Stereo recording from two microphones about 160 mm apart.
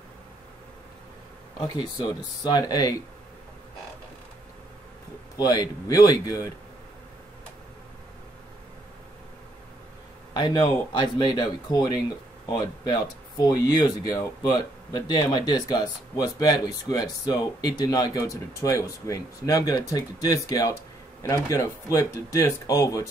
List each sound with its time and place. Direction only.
2.4 s speech: 25° left (ahead or behind)
5.4 s speech: 25° left (ahead or behind)
10.3 s speech: 25° left (ahead or behind)